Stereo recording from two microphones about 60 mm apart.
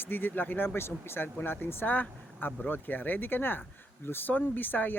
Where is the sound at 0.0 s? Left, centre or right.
Left.